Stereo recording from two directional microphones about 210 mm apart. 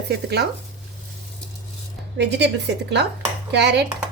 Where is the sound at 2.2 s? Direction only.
55° right (ahead or behind).